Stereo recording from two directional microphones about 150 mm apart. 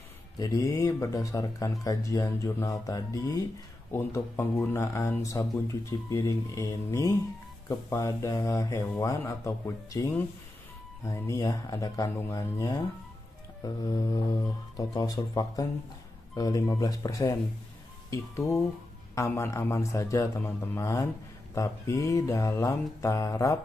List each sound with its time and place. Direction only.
0.4 s speech: 25° left (ahead or behind)